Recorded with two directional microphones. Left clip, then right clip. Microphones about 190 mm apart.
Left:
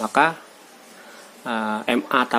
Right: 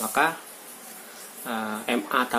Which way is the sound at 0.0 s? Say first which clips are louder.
Left 5 dB; 50° left (ahead or behind).